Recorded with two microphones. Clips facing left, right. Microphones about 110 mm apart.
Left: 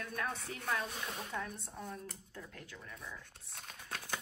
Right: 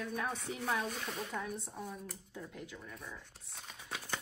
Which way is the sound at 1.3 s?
5° right (ahead or behind).